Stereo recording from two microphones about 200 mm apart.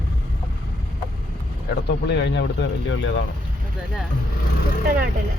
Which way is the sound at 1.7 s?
55° left (ahead or behind).